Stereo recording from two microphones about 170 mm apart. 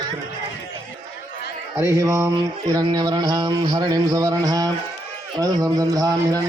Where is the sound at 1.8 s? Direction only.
15° right (ahead or behind).